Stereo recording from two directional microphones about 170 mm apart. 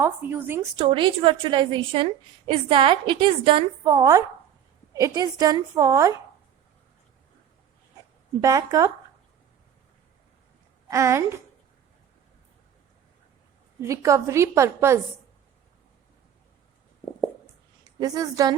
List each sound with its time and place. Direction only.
0.0 s a woman's voice: 10° right (ahead or behind)
0.8 s a woman's voice: 30° right (ahead or behind)
3.9 s a woman's voice: 20° right (ahead or behind)
8.4 s a woman's voice: 20° right (ahead or behind)
10.8 s a woman's voice: 20° right (ahead or behind)
13.8 s a woman's voice: 20° right (ahead or behind)
17.8 s a woman's voice: 20° right (ahead or behind)